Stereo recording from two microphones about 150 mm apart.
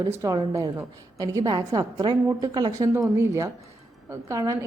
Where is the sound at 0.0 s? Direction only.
20° right (ahead or behind).